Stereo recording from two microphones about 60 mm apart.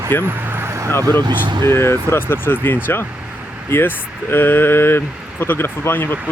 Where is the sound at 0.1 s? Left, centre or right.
Left.